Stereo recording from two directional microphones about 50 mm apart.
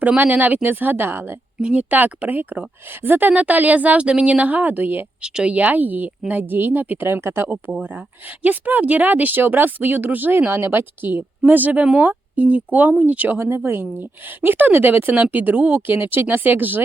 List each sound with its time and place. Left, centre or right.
0.2 s speech: right
1.5 s speech: right
1.8 s speech: right
5.2 s speech: centre; by 7.4 s right
7.9 s speech: right
13.3 s speech: right